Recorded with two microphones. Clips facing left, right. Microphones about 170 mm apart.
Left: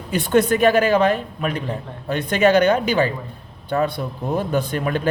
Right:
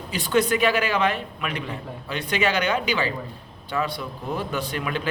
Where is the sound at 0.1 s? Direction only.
55° left (ahead or behind).